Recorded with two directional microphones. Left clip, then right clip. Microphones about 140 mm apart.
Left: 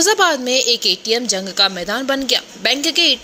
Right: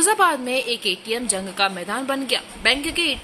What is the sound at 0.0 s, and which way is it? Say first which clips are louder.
Speech: left 4 dB; 30° left (ahead or behind).